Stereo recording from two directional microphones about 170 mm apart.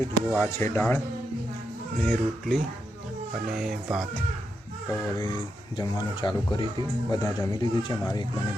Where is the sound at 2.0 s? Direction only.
Centre (ahead or behind).